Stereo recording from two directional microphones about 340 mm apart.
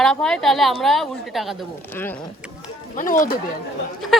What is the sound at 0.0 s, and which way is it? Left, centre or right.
A woman's voice, centre.